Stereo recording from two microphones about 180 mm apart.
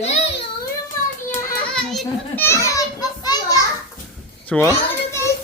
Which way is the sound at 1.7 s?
Centre (ahead or behind).